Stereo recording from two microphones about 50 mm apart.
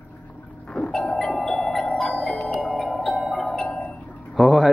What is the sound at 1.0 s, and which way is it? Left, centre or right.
Music, centre.